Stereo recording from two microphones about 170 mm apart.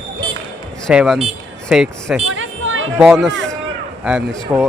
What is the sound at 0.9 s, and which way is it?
Speech, 5° right (ahead or behind).